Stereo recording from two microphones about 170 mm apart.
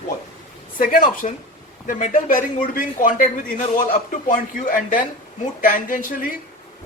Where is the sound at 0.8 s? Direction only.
55° left (ahead or behind).